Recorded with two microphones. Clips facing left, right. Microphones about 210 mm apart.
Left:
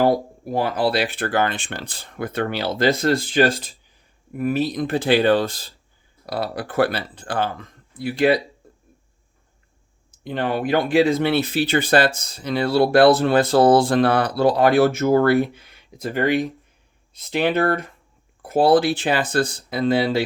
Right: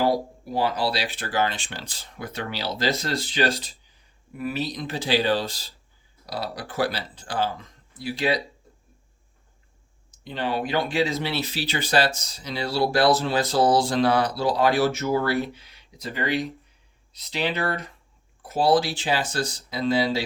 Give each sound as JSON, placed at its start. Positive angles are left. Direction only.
{"t": 0.0, "sound": "speech", "side_deg": 55}
{"t": 8.6, "sound": "a sound", "side_deg": 55}
{"t": 10.1, "sound": "speech", "side_deg": 55}